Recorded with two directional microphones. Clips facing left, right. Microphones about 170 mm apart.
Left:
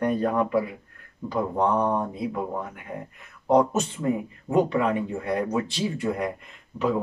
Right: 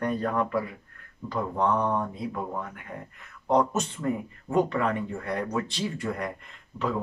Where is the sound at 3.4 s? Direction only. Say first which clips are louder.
Left 4 dB; 10° left (ahead or behind).